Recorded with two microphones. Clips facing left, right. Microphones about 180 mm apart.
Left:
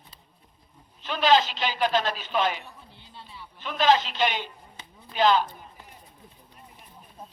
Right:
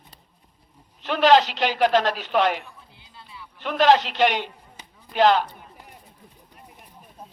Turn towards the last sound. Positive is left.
turn(degrees=-65)  # may be behind; listen again after turning